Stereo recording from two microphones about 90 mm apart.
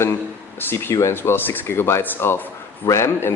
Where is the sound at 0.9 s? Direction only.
30° left (ahead or behind).